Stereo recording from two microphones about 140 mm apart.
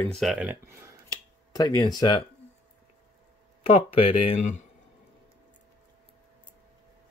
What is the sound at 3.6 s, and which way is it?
Speech, 45° left (ahead or behind).